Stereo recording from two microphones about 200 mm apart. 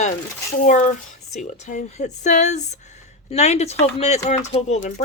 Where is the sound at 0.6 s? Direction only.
40° left (ahead or behind).